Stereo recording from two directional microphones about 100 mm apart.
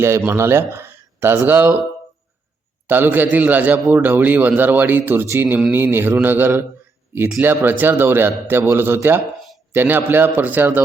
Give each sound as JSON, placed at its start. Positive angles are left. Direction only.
{"t": 0.3, "sound": "speech", "side_deg": -25}
{"t": 2.8, "sound": "a man's voice", "side_deg": -20}